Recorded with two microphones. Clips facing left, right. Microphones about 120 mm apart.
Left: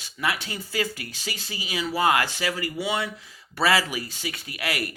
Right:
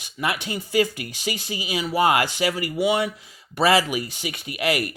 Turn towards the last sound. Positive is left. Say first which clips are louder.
# right 6 dB
turn(degrees=-20)  # may be behind; listen again after turning